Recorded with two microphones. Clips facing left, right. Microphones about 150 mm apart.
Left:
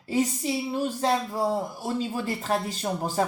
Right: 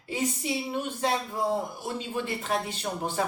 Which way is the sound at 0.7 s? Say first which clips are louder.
Left 4 dB; 35° left (ahead or behind).